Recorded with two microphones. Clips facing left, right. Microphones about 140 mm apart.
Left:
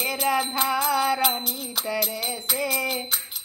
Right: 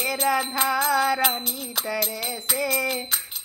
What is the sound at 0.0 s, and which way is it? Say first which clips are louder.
Music: right 1 dB; 25° left (ahead or behind).